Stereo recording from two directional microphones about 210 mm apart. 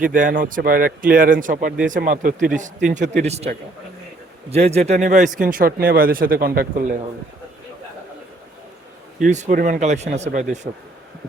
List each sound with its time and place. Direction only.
0.0 s speech: 40° right (ahead or behind)
4.5 s speech: 30° right (ahead or behind)
9.2 s speech: 35° right (ahead or behind)